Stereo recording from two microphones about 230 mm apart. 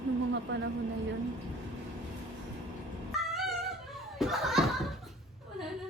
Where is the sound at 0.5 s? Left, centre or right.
Right.